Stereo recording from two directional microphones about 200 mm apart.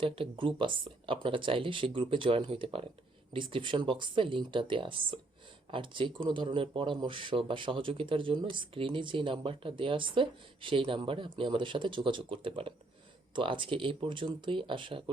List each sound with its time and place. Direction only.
0.0 s speech: 25° right (ahead or behind)